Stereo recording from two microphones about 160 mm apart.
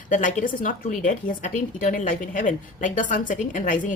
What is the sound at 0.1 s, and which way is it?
A woman's voice, 50° left (ahead or behind).